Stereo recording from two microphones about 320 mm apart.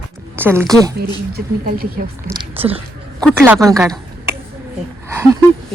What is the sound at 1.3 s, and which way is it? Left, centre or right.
Speech, right.